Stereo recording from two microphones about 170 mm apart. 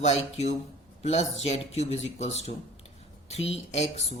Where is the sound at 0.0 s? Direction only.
40° left (ahead or behind).